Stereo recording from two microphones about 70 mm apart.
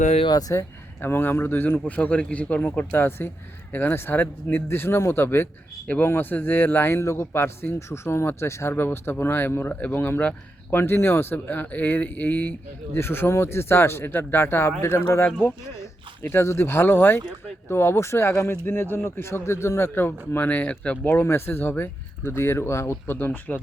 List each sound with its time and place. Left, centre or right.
0.3 s speech: left
1.0 s a man's voice: left
1.8 s a man's voice: centre
21.0 s a man's voice: left
23.1 s speech: left